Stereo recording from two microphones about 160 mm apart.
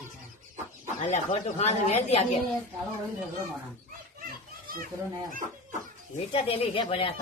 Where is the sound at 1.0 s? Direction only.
45° left (ahead or behind).